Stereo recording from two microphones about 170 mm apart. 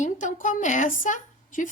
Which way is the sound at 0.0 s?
45° left (ahead or behind).